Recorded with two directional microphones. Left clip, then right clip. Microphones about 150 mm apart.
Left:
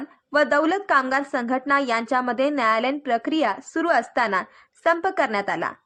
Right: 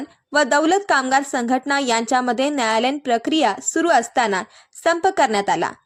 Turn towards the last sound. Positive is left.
turn(degrees=-35)  # may be behind; listen again after turning